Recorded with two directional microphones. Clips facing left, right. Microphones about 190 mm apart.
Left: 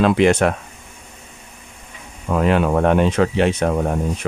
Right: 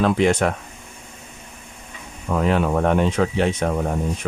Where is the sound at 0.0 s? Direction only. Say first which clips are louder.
Left 3 dB; 75° left (ahead or behind).